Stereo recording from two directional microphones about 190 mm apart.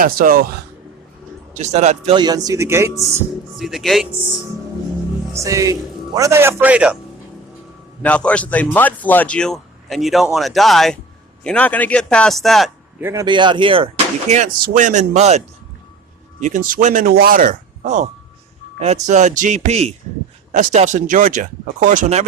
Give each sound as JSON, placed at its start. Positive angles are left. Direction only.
{"t": 0.0, "sound": "speech", "side_deg": -50}
{"t": 1.5, "sound": "speech", "side_deg": -35}
{"t": 2.1, "sound": "speech", "side_deg": -20}
{"t": 3.6, "sound": "a man's voice", "side_deg": 0}
{"t": 5.3, "sound": "a man's voice", "side_deg": -15}
{"t": 8.0, "sound": "a man's voice", "side_deg": 5}
{"t": 13.0, "sound": "a man's voice", "side_deg": -10}
{"t": 13.2, "sound": "speech", "side_deg": -25}
{"t": 20.5, "sound": "speech", "side_deg": -45}